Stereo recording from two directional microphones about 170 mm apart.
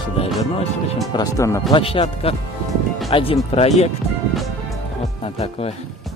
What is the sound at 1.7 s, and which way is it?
Speech, 35° left (ahead or behind).